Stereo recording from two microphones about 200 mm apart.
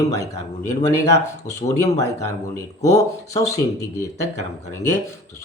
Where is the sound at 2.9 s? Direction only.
15° left (ahead or behind).